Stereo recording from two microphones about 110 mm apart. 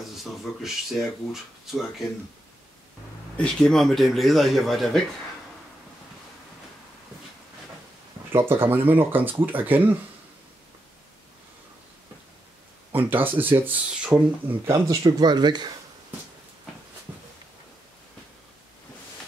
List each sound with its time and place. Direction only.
0.0 s speech: centre (ahead or behind)
3.3 s speech: 10° left (ahead or behind)
8.3 s speech: 20° right (ahead or behind)
12.9 s speech: 15° right (ahead or behind)
14.7 s speech: 35° right (ahead or behind)